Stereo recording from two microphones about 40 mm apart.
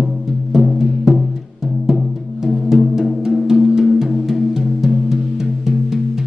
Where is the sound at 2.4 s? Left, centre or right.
Centre.